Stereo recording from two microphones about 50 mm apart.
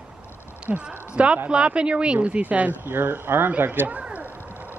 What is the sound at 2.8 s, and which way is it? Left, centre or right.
A man's voice, right.